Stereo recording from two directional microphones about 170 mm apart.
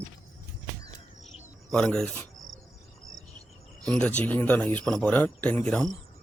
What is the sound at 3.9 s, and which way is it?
Speech, 5° left (ahead or behind).